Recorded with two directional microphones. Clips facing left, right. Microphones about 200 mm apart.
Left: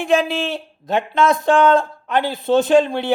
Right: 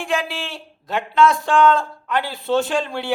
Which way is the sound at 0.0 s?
20° left (ahead or behind).